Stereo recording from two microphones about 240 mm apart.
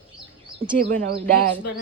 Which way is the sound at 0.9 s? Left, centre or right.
Right.